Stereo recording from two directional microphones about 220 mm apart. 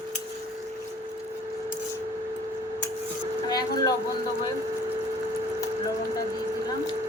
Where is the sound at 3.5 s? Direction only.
15° left (ahead or behind).